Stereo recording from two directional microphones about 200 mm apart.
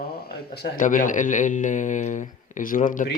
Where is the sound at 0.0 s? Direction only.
50° left (ahead or behind).